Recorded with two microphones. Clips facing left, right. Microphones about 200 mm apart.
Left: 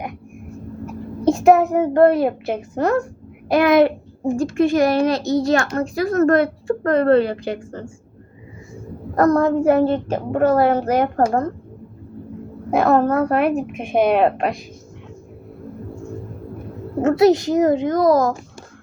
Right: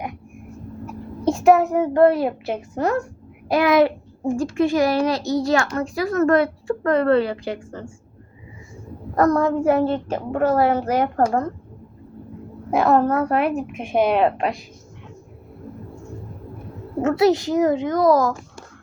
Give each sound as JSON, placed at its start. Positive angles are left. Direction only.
{"t": 1.2, "sound": "child singing", "side_deg": 20}
{"t": 1.5, "sound": "a woman's voice", "side_deg": 45}
{"t": 5.2, "sound": "a child's voice", "side_deg": 25}
{"t": 5.7, "sound": "a woman's voice", "side_deg": 45}
{"t": 9.1, "sound": "a woman's voice", "side_deg": 45}
{"t": 12.7, "sound": "a woman's voice", "side_deg": 50}
{"t": 13.7, "sound": "a woman's voice", "side_deg": 15}
{"t": 14.2, "sound": "a woman's voice", "side_deg": 50}
{"t": 17.0, "sound": "a woman's voice", "side_deg": 45}